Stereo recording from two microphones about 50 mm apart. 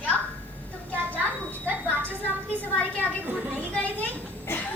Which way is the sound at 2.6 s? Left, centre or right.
Left.